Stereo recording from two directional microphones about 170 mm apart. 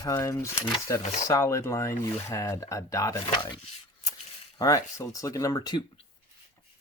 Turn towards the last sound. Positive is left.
turn(degrees=25)  # may be behind; listen again after turning